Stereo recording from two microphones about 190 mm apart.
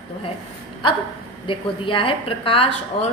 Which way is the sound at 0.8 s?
25° left (ahead or behind).